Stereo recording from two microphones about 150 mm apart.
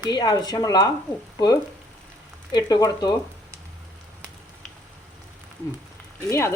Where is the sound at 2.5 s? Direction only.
25° left (ahead or behind).